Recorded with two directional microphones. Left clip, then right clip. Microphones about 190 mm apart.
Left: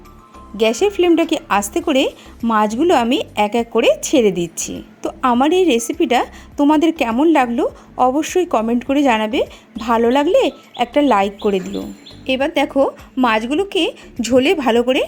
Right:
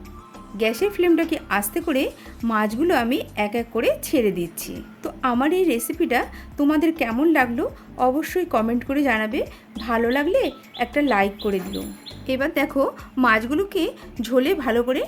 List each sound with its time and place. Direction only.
0.5 s a woman's voice: 25° left (ahead or behind)